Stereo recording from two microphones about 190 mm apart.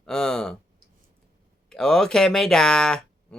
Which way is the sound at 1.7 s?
5° left (ahead or behind).